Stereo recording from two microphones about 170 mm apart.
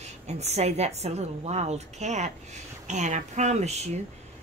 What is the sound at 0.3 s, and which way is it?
A woman's voice, 40° right (ahead or behind).